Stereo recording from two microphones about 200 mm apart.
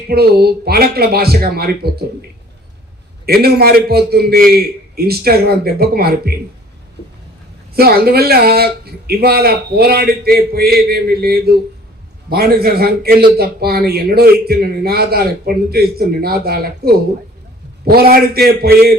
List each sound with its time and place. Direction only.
0.1 s a man's voice: 50° right (ahead or behind)
3.2 s a man's voice: 50° right (ahead or behind)
7.7 s a man's voice: 50° right (ahead or behind)